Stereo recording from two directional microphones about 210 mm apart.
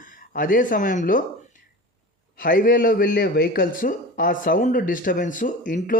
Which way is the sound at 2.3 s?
40° left (ahead or behind).